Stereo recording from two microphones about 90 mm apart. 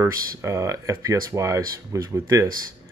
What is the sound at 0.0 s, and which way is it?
Speech, 30° right (ahead or behind).